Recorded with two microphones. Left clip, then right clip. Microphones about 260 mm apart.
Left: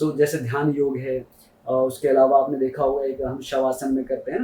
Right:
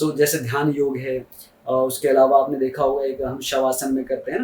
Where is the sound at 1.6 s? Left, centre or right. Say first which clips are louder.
Right 1 dB; left.